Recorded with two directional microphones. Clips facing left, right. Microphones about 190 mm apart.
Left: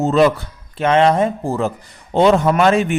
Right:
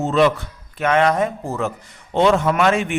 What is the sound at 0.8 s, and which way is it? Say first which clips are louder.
A man's voice: left 3 dB; 30° left (ahead or behind).